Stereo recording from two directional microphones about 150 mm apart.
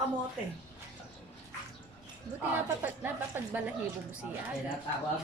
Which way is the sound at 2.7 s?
15° right (ahead or behind).